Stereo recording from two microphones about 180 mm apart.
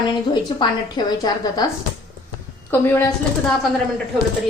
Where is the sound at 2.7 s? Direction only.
10° left (ahead or behind).